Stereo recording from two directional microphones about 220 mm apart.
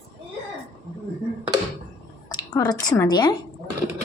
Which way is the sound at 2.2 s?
15° left (ahead or behind).